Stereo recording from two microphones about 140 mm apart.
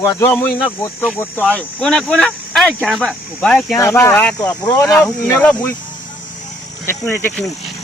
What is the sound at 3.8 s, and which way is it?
Speech, 20° left (ahead or behind).